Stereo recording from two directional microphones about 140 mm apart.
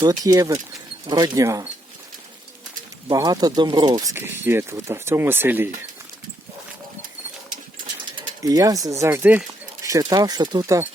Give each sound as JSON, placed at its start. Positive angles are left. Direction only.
{"t": 0.0, "sound": "speech", "side_deg": -25}
{"t": 3.1, "sound": "speech", "side_deg": -25}
{"t": 4.1, "sound": "speech", "side_deg": -15}
{"t": 8.4, "sound": "speech", "side_deg": -25}